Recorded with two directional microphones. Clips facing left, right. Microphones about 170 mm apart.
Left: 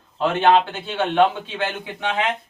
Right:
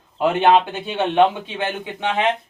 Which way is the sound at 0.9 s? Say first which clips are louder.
Right 1 dB; 20° right (ahead or behind).